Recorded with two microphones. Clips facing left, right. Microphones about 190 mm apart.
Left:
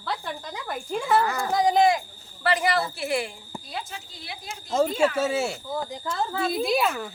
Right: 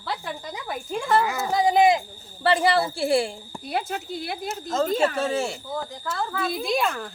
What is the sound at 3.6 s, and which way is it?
Speech, 60° right (ahead or behind).